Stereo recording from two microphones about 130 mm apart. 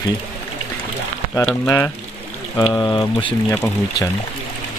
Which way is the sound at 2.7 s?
35° left (ahead or behind).